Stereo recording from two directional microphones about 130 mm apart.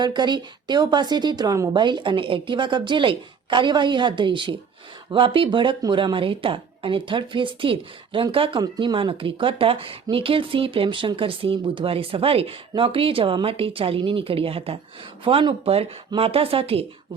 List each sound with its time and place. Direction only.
0.0 s a woman's voice: 35° right (ahead or behind)
1.7 s a woman's voice: 35° right (ahead or behind)